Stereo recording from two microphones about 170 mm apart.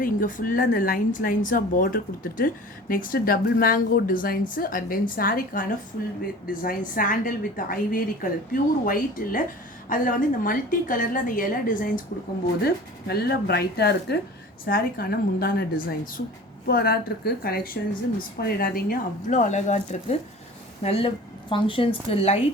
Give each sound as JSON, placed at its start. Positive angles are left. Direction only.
{"t": 0.0, "sound": "a woman's voice", "side_deg": 55}
{"t": 12.6, "sound": "a woman's voice", "side_deg": 70}